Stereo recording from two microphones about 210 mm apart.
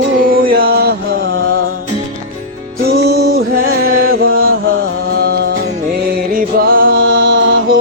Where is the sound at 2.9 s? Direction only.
50° right (ahead or behind).